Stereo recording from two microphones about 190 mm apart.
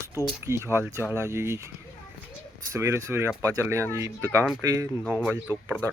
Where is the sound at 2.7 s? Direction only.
15° right (ahead or behind).